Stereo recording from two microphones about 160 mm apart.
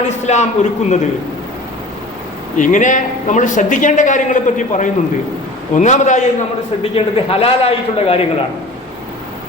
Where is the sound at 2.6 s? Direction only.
50° left (ahead or behind).